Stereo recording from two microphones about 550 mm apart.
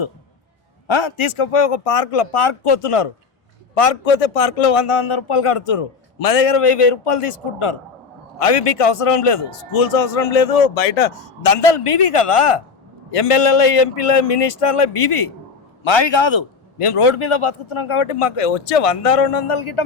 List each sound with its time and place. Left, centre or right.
0.9 s a man's voice: left
3.8 s a man's voice: left
15.8 s a man's voice: left